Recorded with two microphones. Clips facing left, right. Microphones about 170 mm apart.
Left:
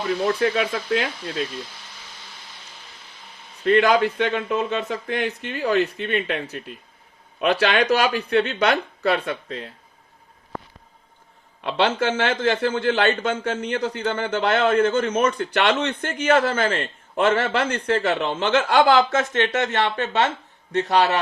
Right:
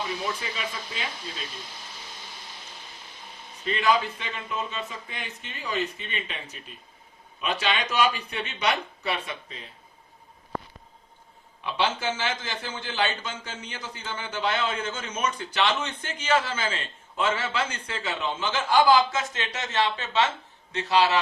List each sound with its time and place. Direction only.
0.0 s speech: 65° left (ahead or behind)
3.6 s a man's voice: 65° left (ahead or behind)
11.6 s a man's voice: 60° left (ahead or behind)